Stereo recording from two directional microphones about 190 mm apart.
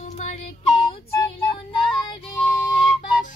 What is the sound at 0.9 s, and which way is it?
Child singing, 30° left (ahead or behind).